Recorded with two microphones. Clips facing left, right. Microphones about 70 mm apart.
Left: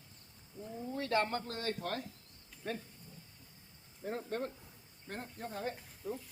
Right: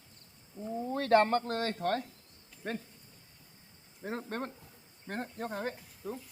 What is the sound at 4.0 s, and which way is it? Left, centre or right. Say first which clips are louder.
Speech: right 1 dB; right.